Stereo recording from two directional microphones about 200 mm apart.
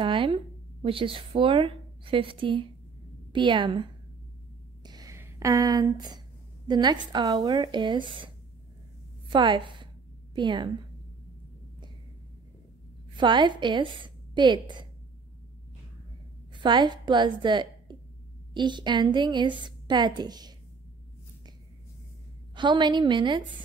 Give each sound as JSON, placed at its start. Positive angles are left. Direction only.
{"t": 0.0, "sound": "a sound", "side_deg": -25}
{"t": 0.8, "sound": "a woman's voice", "side_deg": -25}
{"t": 4.8, "sound": "a sound", "side_deg": -20}
{"t": 6.7, "sound": "a woman's voice", "side_deg": -20}
{"t": 9.3, "sound": "a woman's voice", "side_deg": -25}
{"t": 13.1, "sound": "a woman's voice", "side_deg": -25}
{"t": 16.5, "sound": "a woman's voice", "side_deg": -20}
{"t": 22.6, "sound": "a woman's voice", "side_deg": -20}